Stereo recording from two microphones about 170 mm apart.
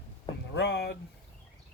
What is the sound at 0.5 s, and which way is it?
Speech, 90° left.